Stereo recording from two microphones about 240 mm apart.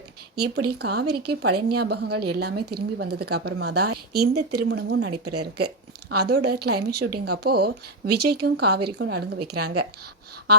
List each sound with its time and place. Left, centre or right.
0.3 s a woman's voice: right
5.1 s speech: right
6.2 s a woman's voice: right